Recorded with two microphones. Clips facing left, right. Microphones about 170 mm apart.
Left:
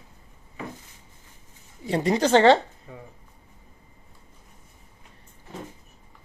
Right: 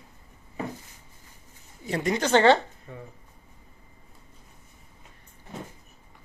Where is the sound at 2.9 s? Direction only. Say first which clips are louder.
Right 1 dB; 10° left (ahead or behind).